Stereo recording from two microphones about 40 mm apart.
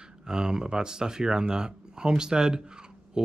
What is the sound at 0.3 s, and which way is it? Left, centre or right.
Speech, centre.